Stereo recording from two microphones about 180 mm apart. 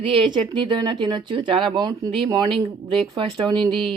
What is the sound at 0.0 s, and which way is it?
Speech, 30° right (ahead or behind).